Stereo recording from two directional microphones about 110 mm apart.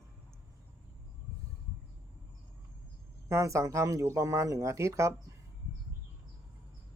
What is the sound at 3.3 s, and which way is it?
Speech, 30° right (ahead or behind).